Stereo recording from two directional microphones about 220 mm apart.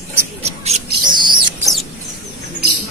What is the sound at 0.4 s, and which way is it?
Bird, 30° right (ahead or behind).